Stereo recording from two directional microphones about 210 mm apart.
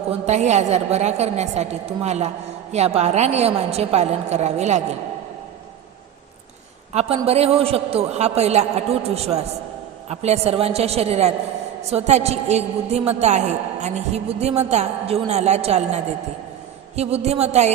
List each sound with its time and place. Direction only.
0.3 s a woman's voice: 35° right (ahead or behind)
6.9 s a man's voice: 30° right (ahead or behind)